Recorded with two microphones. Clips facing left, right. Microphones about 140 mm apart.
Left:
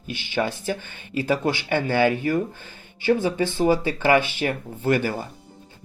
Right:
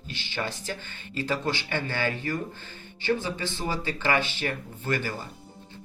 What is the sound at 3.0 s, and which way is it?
Speech, 50° left (ahead or behind).